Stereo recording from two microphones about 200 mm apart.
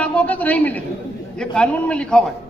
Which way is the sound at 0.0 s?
5° left (ahead or behind).